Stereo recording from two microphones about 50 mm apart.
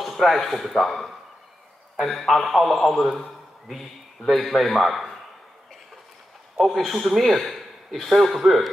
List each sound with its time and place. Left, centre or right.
0.0 s a man's voice: centre
6.6 s a man's voice: centre